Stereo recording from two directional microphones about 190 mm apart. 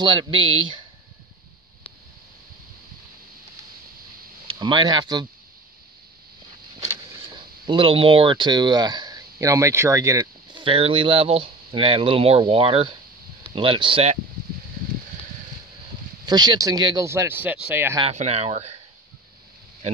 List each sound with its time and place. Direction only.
0.0 s speech: 25° right (ahead or behind)
4.5 s speech: 25° right (ahead or behind)
7.3 s speech: 25° right (ahead or behind)
16.3 s speech: 20° right (ahead or behind)
18.0 s speech: 35° right (ahead or behind)